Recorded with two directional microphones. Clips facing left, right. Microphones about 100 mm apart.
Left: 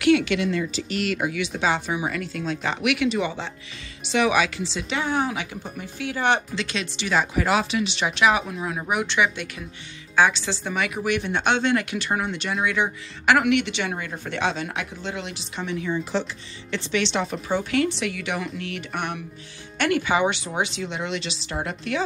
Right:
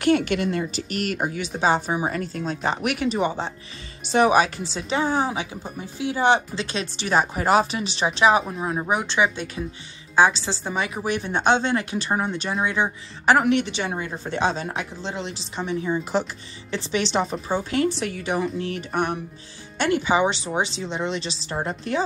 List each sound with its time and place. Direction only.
0.0 s a woman's voice: 45° right (ahead or behind)